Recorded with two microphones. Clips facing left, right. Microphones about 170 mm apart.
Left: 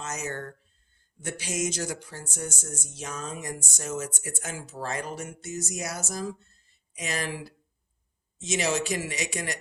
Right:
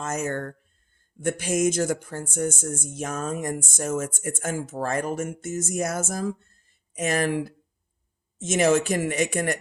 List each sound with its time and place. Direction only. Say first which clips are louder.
0.0 s speech: right 6 dB; 50° right (ahead or behind)